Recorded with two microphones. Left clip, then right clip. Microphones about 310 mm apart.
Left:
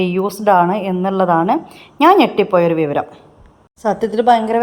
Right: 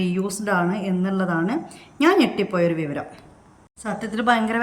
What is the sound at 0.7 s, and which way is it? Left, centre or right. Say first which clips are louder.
A woman's voice: left 8 dB; centre.